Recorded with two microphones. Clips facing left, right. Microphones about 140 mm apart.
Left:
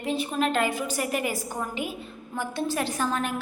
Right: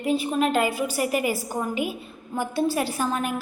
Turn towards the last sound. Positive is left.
turn(degrees=-10)  # may be behind; listen again after turning